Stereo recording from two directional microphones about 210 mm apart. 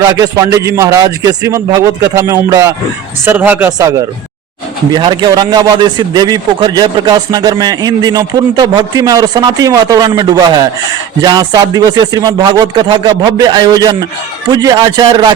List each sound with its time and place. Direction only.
0.2 s a man's voice: 15° right (ahead or behind)